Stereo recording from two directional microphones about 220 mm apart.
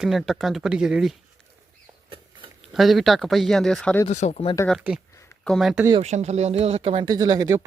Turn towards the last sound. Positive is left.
turn(degrees=-15)  # may be behind; listen again after turning